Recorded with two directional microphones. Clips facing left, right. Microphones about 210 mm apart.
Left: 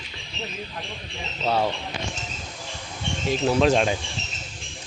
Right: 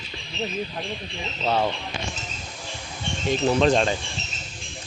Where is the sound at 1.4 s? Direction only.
10° left (ahead or behind).